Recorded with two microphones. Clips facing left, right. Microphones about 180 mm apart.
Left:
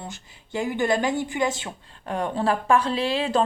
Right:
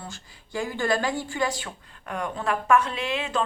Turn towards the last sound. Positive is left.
turn(degrees=35)  # may be behind; listen again after turning